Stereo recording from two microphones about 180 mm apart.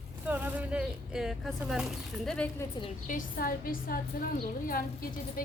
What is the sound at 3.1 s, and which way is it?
A woman's voice, 50° left (ahead or behind).